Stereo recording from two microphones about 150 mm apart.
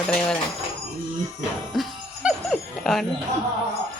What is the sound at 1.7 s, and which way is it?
Jingle bell, centre (ahead or behind).